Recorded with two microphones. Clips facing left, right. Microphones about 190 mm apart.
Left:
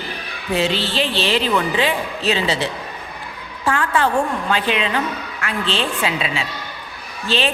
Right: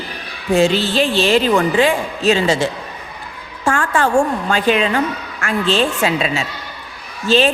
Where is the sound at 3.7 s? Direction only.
45° right (ahead or behind).